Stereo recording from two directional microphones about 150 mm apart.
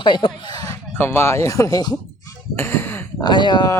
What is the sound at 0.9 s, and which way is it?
Speech, 15° left (ahead or behind).